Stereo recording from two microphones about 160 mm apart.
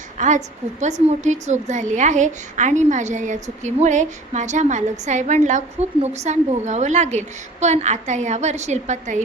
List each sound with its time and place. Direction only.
0.2 s a woman's voice: 50° right (ahead or behind)